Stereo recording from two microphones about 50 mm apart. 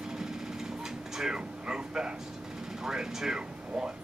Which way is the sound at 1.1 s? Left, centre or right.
Centre.